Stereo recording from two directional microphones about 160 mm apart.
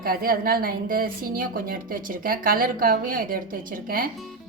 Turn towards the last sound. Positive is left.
turn(degrees=-65)  # may be behind; listen again after turning